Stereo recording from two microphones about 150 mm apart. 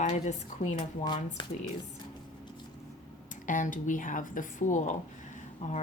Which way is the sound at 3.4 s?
60° left (ahead or behind).